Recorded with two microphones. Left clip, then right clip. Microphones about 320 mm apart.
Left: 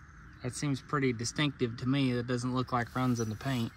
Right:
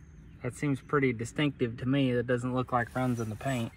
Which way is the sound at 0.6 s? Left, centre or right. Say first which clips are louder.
Right 4 dB; centre.